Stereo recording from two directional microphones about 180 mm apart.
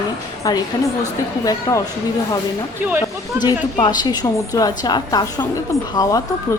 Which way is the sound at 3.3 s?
10° right (ahead or behind).